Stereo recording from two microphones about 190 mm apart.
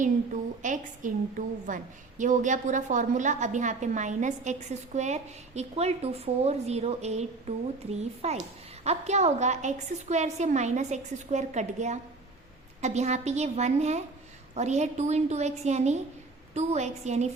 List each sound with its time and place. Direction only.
0.6 s a woman's voice: 40° right (ahead or behind)